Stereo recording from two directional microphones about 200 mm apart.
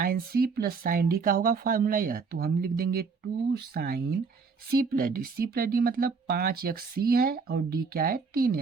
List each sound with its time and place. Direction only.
0.0 s speech: 50° right (ahead or behind)